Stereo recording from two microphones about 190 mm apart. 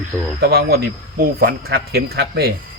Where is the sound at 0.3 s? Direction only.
55° right (ahead or behind).